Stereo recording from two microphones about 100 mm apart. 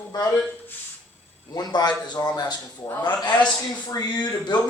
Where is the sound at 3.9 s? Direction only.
40° left (ahead or behind).